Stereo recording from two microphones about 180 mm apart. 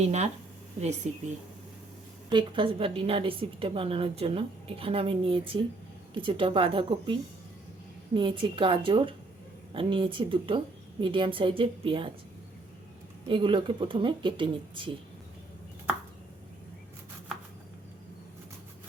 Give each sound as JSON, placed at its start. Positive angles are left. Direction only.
{"t": 0.0, "sound": "a woman's voice", "side_deg": -35}
{"t": 2.3, "sound": "a woman's voice", "side_deg": -25}
{"t": 13.2, "sound": "speech", "side_deg": -30}